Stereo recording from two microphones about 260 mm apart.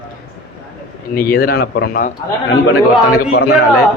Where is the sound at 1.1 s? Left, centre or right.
Left.